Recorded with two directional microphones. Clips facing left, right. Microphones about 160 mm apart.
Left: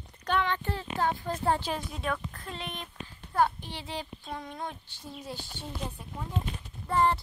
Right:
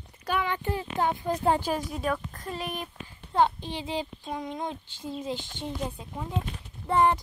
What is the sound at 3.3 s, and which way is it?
A child's voice, 20° right (ahead or behind).